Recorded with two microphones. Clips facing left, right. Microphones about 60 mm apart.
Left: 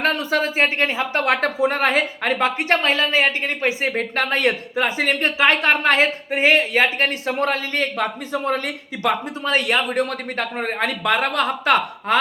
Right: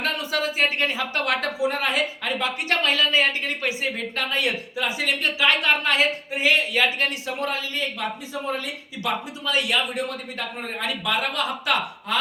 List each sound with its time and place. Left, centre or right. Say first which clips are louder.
0.0 s speech: left 5 dB; left